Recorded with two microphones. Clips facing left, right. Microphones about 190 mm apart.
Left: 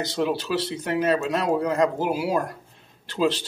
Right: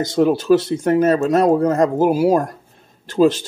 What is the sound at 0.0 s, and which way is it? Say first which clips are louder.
Speech: right 9 dB; 45° right (ahead or behind).